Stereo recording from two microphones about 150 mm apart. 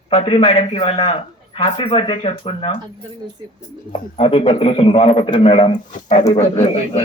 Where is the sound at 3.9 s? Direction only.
40° left (ahead or behind).